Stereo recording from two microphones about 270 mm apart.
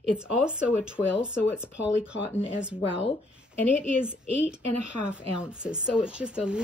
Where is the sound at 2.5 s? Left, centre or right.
Centre.